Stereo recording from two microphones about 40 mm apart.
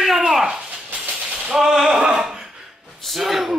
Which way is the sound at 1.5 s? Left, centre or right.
Centre.